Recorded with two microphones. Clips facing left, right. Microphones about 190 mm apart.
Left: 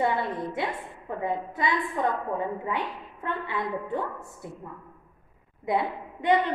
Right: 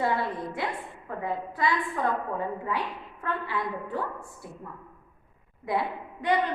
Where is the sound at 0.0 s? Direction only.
20° left (ahead or behind).